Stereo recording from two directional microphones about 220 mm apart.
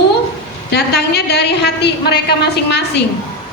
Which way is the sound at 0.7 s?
50° left (ahead or behind).